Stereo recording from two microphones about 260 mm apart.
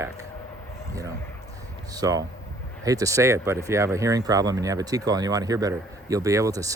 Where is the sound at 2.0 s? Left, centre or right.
Centre.